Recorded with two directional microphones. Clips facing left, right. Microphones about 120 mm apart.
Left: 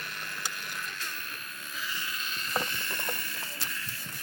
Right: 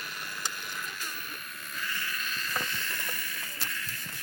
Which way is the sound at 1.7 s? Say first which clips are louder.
Right 1 dB; 15° left (ahead or behind).